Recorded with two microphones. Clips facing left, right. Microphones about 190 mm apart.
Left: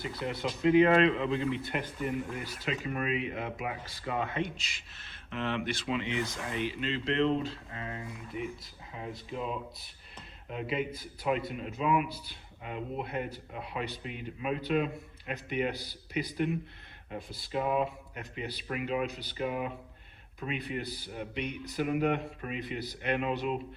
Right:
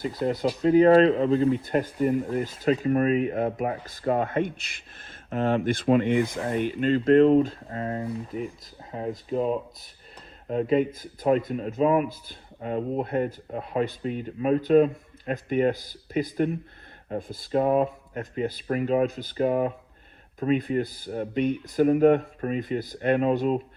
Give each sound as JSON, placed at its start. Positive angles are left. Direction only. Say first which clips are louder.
{"t": 0.0, "sound": "speech", "louder": "right 9 dB", "side_deg": -40}